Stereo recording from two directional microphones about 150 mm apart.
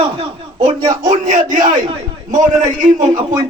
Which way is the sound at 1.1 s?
55° right (ahead or behind).